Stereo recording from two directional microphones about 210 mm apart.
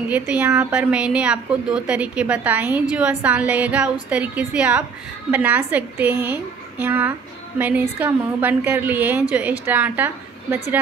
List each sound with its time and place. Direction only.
0.1 s a woman's voice: 5° right (ahead or behind)